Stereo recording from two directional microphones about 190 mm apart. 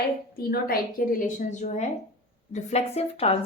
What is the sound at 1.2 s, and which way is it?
Speech, 35° left (ahead or behind).